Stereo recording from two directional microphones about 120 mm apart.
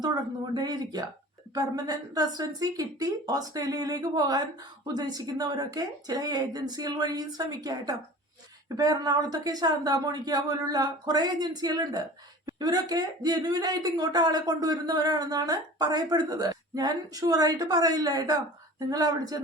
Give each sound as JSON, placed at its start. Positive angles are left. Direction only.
{"t": 0.0, "sound": "speech", "side_deg": -35}